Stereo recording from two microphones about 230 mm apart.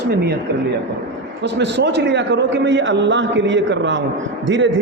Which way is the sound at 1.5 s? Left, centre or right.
Right.